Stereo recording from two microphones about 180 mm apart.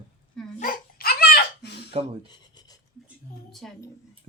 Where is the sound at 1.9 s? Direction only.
35° right (ahead or behind).